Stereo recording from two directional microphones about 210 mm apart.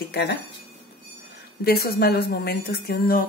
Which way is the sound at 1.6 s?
50° left (ahead or behind).